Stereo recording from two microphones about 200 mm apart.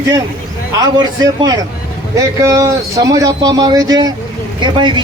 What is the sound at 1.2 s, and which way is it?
A man's voice, 20° right (ahead or behind).